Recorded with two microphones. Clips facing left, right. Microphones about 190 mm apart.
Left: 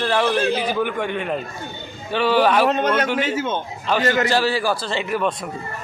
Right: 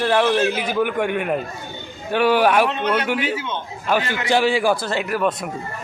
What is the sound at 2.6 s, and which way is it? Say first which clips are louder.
A man's voice: left 2 dB; 45° left (ahead or behind).